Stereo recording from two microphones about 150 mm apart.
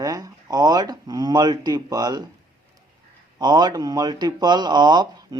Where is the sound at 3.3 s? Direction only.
25° right (ahead or behind).